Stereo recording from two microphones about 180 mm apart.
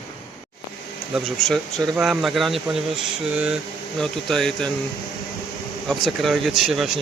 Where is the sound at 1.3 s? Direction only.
Centre (ahead or behind).